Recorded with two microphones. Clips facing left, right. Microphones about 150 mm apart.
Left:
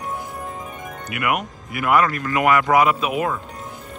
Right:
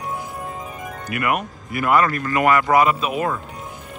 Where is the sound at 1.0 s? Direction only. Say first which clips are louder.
Right 1 dB; 15° left (ahead or behind).